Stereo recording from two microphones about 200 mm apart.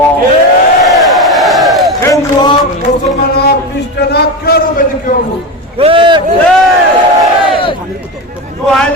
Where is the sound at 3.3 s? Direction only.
55° left (ahead or behind).